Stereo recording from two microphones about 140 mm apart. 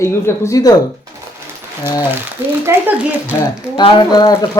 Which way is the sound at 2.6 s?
15° right (ahead or behind).